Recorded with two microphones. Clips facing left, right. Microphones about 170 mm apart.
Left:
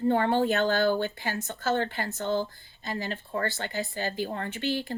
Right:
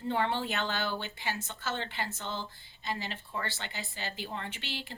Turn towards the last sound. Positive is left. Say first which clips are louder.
# left 11 dB
turn(degrees=45)  # may be behind; listen again after turning